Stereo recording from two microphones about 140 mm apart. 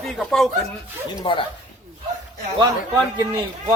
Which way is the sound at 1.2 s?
40° left (ahead or behind).